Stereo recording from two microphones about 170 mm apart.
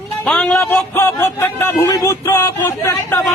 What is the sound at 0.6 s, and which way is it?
Music, 15° left (ahead or behind).